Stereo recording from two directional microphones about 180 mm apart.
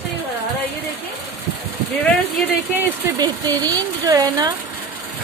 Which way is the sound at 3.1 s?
25° right (ahead or behind).